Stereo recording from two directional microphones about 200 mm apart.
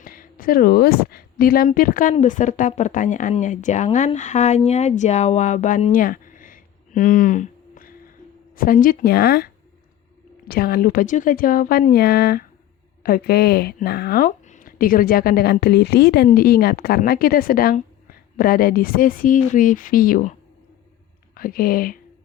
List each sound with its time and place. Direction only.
0.0 s a woman's voice: 45° left (ahead or behind)
10.5 s a woman's voice: 50° left (ahead or behind)
21.3 s speech: 45° left (ahead or behind)